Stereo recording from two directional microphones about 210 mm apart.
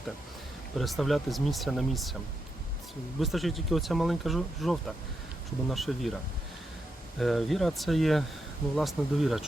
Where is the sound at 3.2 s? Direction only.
Centre (ahead or behind).